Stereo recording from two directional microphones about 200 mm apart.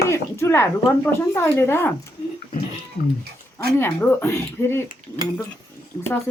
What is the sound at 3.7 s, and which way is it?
Speech, 10° left (ahead or behind).